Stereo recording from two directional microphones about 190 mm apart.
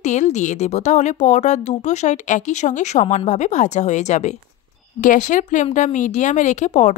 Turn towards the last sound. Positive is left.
turn(degrees=40)  # may be behind; listen again after turning